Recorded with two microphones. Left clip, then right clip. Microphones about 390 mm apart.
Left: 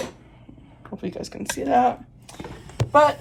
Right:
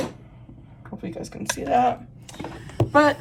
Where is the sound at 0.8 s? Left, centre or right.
Centre.